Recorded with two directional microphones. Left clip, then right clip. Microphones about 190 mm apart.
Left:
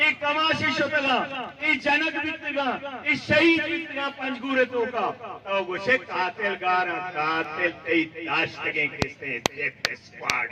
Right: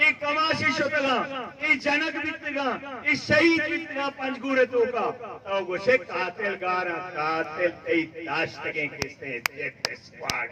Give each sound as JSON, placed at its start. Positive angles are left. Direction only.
{"t": 0.0, "sound": "a man's voice", "side_deg": 45}